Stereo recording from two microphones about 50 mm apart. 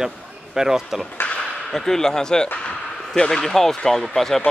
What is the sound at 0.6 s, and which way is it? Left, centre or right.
Speech, centre.